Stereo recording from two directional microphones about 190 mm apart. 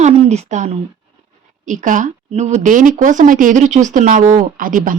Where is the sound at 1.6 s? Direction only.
40° right (ahead or behind).